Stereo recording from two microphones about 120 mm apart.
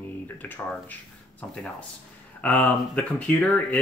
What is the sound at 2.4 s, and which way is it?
Speech, 10° left (ahead or behind).